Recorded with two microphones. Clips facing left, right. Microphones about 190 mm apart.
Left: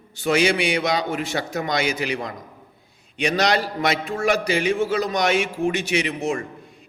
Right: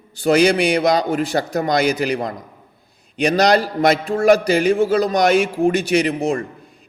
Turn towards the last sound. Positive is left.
turn(degrees=-35)  # may be behind; listen again after turning